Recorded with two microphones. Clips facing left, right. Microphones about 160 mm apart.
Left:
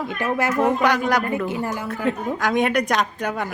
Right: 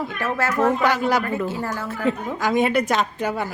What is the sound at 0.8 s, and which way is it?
Speech, 5° right (ahead or behind).